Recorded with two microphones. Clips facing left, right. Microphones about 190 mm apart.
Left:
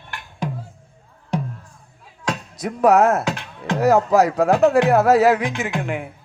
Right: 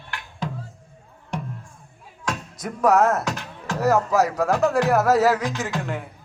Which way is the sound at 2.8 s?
30° left (ahead or behind).